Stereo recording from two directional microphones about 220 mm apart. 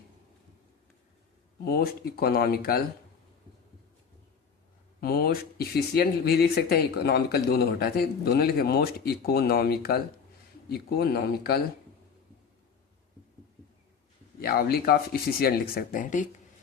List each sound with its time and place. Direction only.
1.6 s speech: 45° left (ahead or behind)
4.9 s speech: 45° left (ahead or behind)
14.3 s speech: 45° left (ahead or behind)